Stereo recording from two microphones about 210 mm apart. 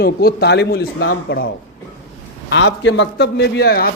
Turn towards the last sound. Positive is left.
turn(degrees=50)  # may be behind; listen again after turning